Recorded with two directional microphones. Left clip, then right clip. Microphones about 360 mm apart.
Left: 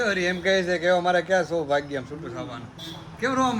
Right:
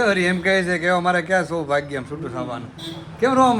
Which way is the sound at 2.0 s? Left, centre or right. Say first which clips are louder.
Right 5 dB; right.